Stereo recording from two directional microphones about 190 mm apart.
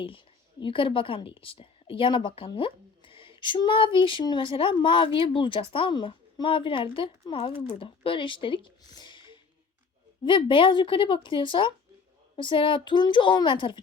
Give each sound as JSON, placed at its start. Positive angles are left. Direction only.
{"t": 0.6, "sound": "a woman's voice", "side_deg": 25}